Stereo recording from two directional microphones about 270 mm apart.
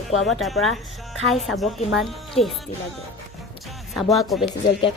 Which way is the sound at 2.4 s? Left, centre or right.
Left.